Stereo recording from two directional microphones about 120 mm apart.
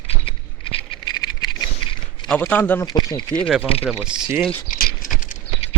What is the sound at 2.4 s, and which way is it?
Speech, 15° left (ahead or behind).